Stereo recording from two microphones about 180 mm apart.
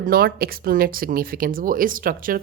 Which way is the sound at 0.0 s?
55° right (ahead or behind).